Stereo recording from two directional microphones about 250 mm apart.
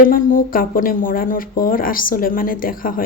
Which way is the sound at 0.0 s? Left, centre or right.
Left.